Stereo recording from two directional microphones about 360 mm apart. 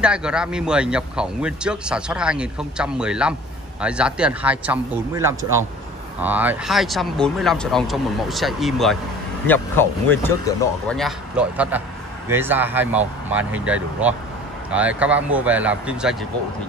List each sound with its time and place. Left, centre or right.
0.0 s a man's voice: centre